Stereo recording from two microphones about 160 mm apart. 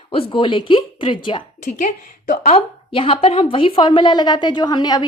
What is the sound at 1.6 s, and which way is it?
A woman's voice, 50° left (ahead or behind).